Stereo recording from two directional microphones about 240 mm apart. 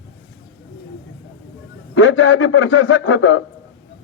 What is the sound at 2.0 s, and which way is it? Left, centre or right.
A man's voice, left.